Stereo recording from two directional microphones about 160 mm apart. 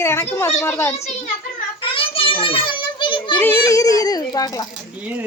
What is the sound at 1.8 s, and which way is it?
Children playing, 35° left (ahead or behind).